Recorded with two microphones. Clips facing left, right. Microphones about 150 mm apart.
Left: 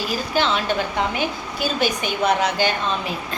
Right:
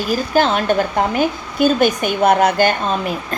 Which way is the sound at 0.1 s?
45° right (ahead or behind).